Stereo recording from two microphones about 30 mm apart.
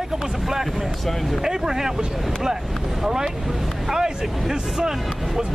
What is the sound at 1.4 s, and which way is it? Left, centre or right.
Speech, centre.